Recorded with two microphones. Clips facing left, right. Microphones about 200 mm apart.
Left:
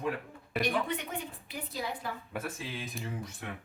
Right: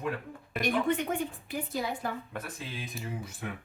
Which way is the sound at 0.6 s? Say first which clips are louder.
Right 5 dB; 50° right (ahead or behind).